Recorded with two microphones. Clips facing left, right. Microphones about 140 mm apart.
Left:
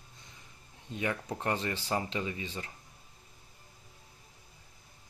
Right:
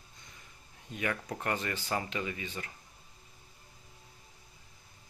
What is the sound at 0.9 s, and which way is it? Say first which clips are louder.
Speech: left 1 dB; 25° left (ahead or behind).